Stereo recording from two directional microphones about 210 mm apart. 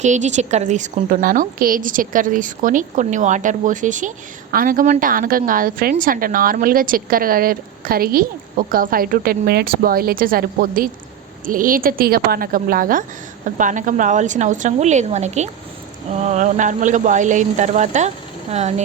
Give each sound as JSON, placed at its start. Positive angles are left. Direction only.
{"t": 0.0, "sound": "a woman's voice", "side_deg": -35}